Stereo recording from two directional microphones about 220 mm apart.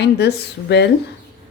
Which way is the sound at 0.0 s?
50° left (ahead or behind).